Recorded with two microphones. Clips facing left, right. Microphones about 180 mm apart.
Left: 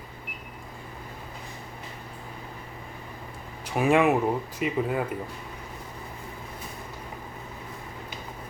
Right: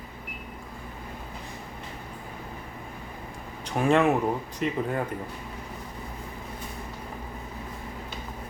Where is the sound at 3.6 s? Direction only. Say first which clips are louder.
Left 1 dB; 5° left (ahead or behind).